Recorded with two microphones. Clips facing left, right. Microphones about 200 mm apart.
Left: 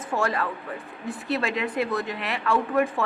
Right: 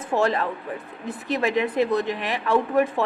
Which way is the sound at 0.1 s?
20° right (ahead or behind).